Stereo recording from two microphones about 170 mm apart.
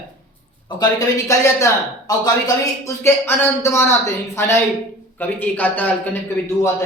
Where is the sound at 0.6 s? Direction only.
20° left (ahead or behind).